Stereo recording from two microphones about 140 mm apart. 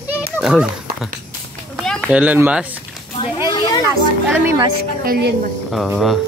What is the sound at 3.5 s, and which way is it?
Children playing, 30° left (ahead or behind).